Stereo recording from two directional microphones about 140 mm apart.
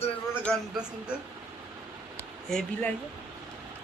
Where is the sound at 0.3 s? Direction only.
10° left (ahead or behind).